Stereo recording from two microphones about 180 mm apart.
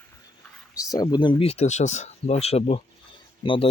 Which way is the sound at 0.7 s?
20° left (ahead or behind).